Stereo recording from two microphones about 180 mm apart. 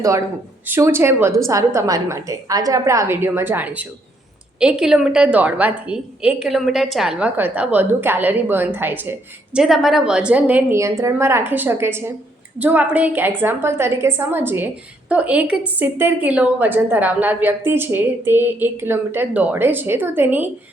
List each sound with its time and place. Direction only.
0.6 s a woman's voice: 10° right (ahead or behind)